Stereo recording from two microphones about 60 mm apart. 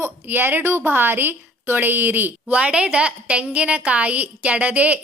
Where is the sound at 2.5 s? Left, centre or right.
Centre.